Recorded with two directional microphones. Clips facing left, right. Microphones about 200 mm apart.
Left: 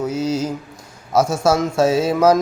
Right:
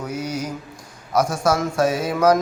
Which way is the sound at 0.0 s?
25° left (ahead or behind).